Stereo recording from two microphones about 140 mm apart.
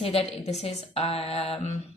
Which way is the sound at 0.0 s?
45° left (ahead or behind).